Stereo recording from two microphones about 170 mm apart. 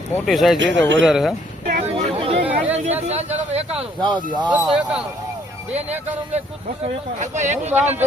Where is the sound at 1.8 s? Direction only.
35° right (ahead or behind).